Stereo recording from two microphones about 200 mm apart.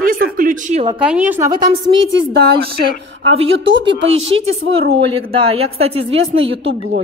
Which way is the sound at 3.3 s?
30° right (ahead or behind).